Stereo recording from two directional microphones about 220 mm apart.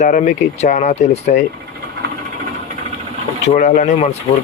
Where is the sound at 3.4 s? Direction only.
35° left (ahead or behind).